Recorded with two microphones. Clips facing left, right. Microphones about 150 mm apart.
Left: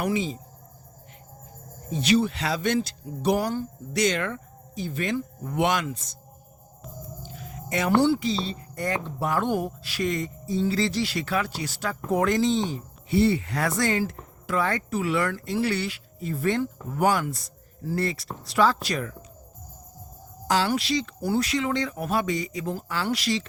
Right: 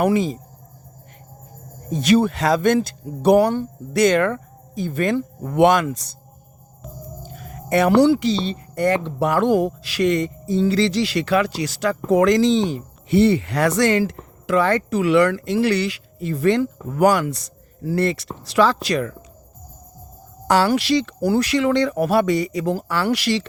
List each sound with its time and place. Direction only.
0.0 s speech: 55° right (ahead or behind)
1.9 s speech: 50° right (ahead or behind)
7.2 s speech: 50° right (ahead or behind); by 18.3 s 70° right (ahead or behind)
18.4 s speech: 85° right
20.5 s speech: 70° right (ahead or behind)